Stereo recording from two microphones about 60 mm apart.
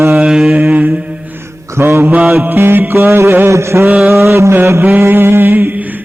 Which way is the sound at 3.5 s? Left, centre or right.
Right.